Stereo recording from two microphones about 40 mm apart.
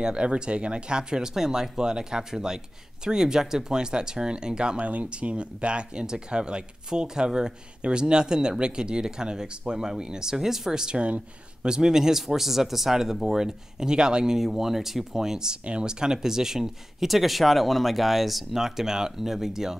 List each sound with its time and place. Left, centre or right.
0.0 s speech: right
4.8 s speech: right; by 11.0 s centre
11.0 s speech: right
11.6 s speech: centre